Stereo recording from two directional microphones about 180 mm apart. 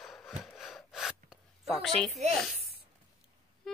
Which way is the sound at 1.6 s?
Centre (ahead or behind).